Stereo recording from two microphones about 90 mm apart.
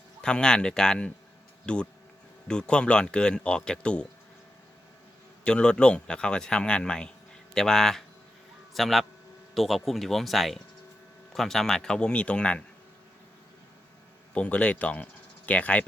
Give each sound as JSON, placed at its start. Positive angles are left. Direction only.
{"t": 0.2, "sound": "speech", "side_deg": 10}
{"t": 5.5, "sound": "a man's voice", "side_deg": 10}
{"t": 14.3, "sound": "speech", "side_deg": 15}